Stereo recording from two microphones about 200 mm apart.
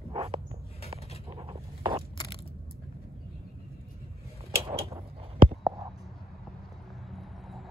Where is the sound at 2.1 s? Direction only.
20° left (ahead or behind).